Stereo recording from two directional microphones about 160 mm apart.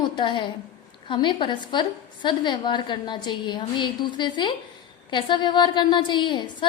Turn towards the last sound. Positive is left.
turn(degrees=30)  # may be behind; listen again after turning